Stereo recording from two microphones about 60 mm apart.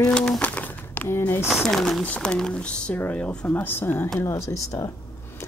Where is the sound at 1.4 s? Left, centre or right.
Centre.